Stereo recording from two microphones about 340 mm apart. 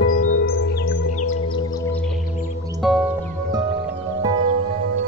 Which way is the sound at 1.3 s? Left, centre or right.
Centre.